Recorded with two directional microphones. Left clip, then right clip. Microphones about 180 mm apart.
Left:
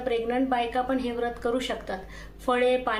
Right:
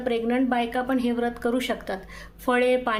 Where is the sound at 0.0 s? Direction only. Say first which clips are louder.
Right 2 dB; 45° right (ahead or behind).